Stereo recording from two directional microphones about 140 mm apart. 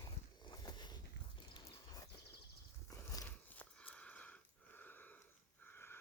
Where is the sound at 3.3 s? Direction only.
10° left (ahead or behind).